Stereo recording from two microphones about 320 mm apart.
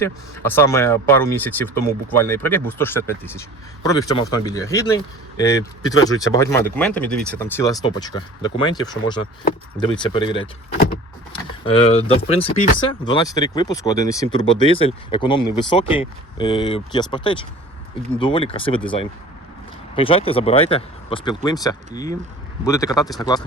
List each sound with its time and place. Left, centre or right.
0.0 s speech: centre
11.6 s speech: centre
20.0 s speech: centre